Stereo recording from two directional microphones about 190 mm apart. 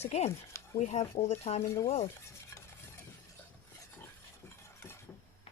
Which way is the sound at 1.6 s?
15° left (ahead or behind).